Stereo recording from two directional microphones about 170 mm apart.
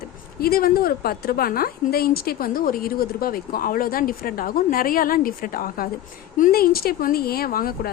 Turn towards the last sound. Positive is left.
turn(degrees=60)  # may be behind; listen again after turning